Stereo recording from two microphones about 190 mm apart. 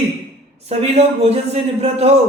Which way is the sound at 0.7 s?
30° right (ahead or behind).